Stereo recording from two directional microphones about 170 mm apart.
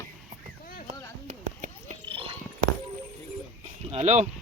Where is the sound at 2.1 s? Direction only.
30° right (ahead or behind).